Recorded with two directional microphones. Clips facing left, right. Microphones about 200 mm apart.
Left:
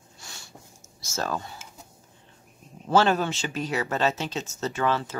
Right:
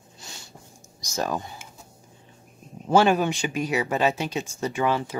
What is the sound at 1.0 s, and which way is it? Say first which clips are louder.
Speech: right 2 dB; 15° right (ahead or behind).